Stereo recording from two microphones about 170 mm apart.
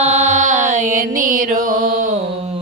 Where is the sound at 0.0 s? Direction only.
40° right (ahead or behind).